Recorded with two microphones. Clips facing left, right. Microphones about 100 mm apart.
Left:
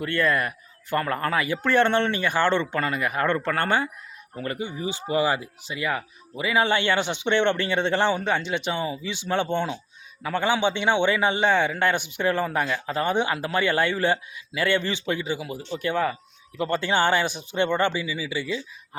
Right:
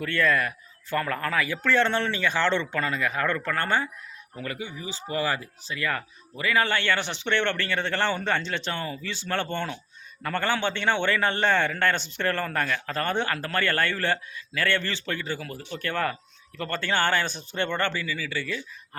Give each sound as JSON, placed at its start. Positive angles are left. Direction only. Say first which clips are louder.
{"t": 0.3, "sound": "speech", "louder": "left 1 dB", "side_deg": 5}
{"t": 1.9, "sound": "speech", "louder": "left 4 dB", "side_deg": 55}
{"t": 2.5, "sound": "a man's voice", "louder": "left 2 dB", "side_deg": 15}
{"t": 3.2, "sound": "speech", "louder": "left 3 dB", "side_deg": 20}
{"t": 4.4, "sound": "speech", "louder": "left 4 dB", "side_deg": 50}
{"t": 4.9, "sound": "a man's voice", "louder": "left 5 dB", "side_deg": 15}